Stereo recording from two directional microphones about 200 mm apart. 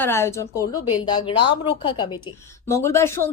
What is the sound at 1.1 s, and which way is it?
A woman's voice, 25° left (ahead or behind).